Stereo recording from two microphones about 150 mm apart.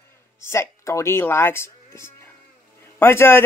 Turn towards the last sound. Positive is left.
turn(degrees=15)  # may be behind; listen again after turning